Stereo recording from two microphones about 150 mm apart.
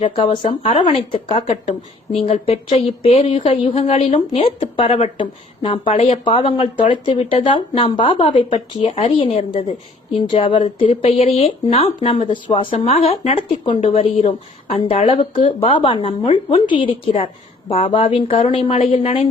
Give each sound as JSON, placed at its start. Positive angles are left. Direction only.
{"t": 0.0, "sound": "speech", "side_deg": 35}